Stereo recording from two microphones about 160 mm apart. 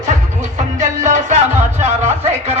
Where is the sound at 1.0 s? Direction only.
50° right (ahead or behind).